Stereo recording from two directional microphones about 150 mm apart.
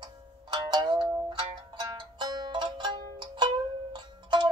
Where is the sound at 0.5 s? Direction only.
30° right (ahead or behind).